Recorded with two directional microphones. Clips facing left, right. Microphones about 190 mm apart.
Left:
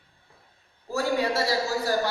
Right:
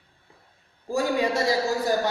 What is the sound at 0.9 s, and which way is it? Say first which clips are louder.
A man's voice: right 2 dB; 15° right (ahead or behind).